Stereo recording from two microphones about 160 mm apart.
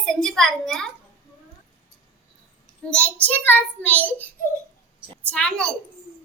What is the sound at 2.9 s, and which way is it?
A child's voice, 10° left (ahead or behind).